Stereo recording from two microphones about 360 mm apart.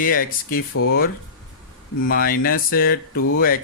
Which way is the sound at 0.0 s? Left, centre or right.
Left.